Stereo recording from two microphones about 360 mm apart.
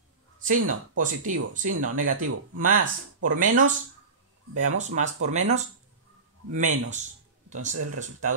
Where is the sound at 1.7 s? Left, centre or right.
Right.